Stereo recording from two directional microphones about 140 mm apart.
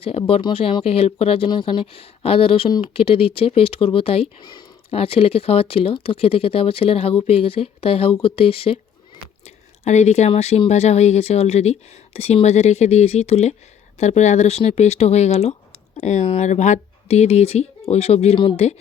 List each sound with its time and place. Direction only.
0.0 s speech: 40° left (ahead or behind)
9.8 s speech: 55° left (ahead or behind)